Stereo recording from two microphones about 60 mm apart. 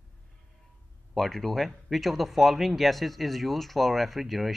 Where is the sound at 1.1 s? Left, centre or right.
Centre.